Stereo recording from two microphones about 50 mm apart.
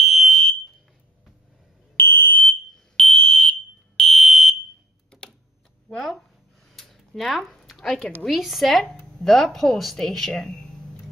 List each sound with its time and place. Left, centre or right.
0.0 s fire alarm: centre
2.0 s fire alarm: left
3.0 s fire alarm: centre
4.1 s fire alarm: centre
5.9 s speech: centre
6.7 s a sound: centre
8.3 s speech: centre